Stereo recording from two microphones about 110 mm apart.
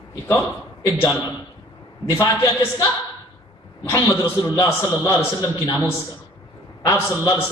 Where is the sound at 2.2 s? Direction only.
25° left (ahead or behind).